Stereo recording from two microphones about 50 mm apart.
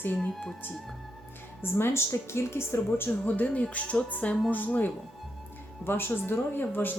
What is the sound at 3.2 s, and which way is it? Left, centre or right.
Speech, left.